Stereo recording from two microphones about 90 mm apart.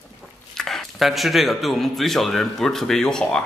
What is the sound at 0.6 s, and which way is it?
Speech, 5° left (ahead or behind).